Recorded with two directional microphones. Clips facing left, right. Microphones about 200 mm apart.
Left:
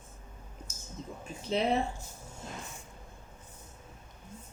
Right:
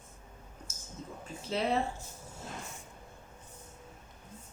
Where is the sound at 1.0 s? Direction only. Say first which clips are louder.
Left 2 dB; 20° left (ahead or behind).